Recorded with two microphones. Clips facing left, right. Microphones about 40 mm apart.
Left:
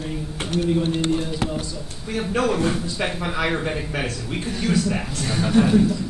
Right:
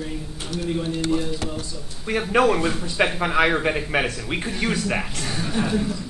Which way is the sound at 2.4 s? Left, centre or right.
Right.